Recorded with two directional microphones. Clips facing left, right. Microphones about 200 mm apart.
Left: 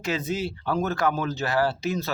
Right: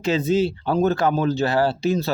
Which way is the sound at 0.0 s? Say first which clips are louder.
Right 8 dB; 25° right (ahead or behind).